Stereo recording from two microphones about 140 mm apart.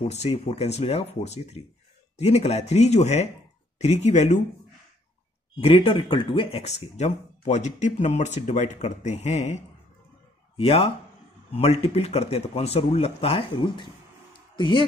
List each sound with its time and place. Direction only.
0.0 s speech: 45° left (ahead or behind)
5.6 s speech: 40° left (ahead or behind)
7.0 s speech: 55° left (ahead or behind)
10.6 s speech: 45° left (ahead or behind)